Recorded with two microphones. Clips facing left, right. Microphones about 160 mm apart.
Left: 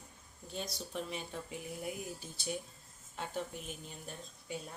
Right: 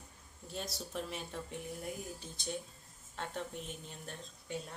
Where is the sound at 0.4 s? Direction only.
Centre (ahead or behind).